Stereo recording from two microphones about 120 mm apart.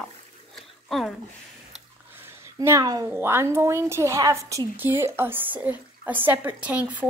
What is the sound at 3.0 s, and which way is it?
A woman's voice, 20° right (ahead or behind).